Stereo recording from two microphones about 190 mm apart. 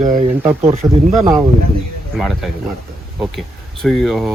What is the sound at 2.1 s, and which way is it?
Speech, centre (ahead or behind).